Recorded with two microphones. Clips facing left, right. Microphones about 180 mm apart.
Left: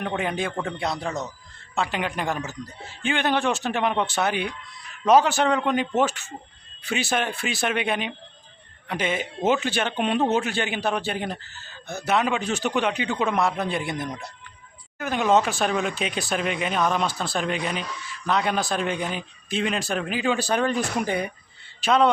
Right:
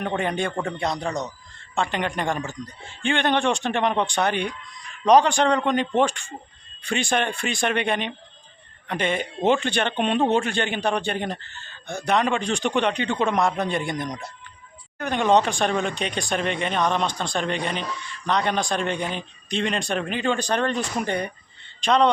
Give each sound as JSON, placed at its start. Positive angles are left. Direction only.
{"t": 0.0, "sound": "a man's voice", "side_deg": 0}